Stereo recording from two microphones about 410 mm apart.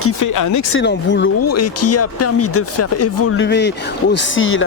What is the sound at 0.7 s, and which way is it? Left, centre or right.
Speech, left.